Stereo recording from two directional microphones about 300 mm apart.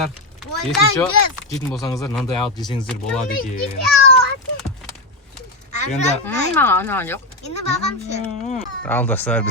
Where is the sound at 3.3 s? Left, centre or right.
Left.